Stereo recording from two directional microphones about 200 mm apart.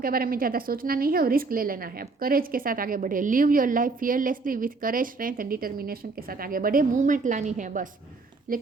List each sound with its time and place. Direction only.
0.0 s a woman's voice: 45° right (ahead or behind)